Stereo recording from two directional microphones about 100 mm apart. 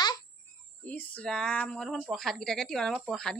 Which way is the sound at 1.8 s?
10° right (ahead or behind).